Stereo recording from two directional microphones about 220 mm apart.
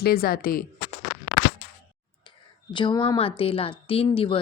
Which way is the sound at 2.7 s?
20° left (ahead or behind).